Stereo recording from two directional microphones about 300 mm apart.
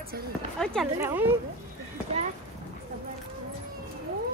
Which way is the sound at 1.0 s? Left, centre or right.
Centre.